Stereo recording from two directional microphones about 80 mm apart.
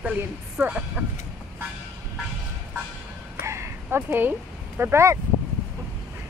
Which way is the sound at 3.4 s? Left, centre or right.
Right.